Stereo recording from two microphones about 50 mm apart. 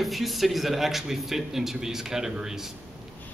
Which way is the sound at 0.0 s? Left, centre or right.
Centre.